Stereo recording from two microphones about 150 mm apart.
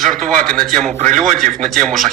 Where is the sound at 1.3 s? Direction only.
60° right (ahead or behind).